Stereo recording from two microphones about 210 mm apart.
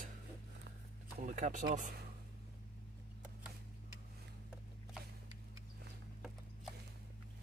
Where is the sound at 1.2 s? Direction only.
35° right (ahead or behind).